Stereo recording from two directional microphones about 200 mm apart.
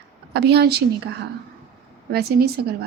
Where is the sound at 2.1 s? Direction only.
50° right (ahead or behind).